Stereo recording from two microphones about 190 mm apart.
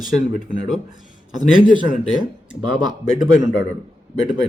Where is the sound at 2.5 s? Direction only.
5° right (ahead or behind).